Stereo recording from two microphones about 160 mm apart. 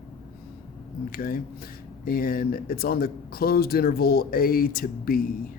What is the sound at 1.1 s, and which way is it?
Speech, 65° left (ahead or behind).